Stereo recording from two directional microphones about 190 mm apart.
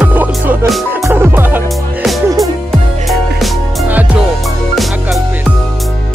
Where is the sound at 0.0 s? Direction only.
10° right (ahead or behind).